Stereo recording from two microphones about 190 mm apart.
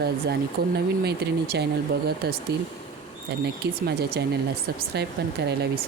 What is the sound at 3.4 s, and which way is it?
Speech, 60° right (ahead or behind).